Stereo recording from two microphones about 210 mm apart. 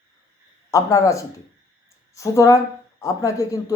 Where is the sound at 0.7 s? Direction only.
15° left (ahead or behind).